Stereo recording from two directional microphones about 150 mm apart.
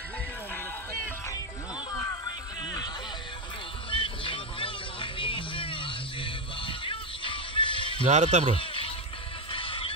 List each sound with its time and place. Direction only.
1.9 s music: 25° left (ahead or behind)
3.9 s music: 35° left (ahead or behind)
8.1 s a man's voice: 50° right (ahead or behind)
8.5 s a sound: 35° left (ahead or behind)
9.5 s music: 35° left (ahead or behind)